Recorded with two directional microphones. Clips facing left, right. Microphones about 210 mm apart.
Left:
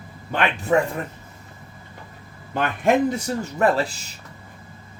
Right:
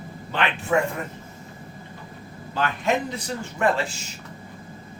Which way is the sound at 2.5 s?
55° left (ahead or behind).